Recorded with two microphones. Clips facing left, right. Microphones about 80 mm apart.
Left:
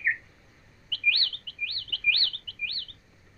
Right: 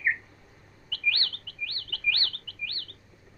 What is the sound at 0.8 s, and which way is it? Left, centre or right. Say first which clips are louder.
Chirp: left 1 dB; right.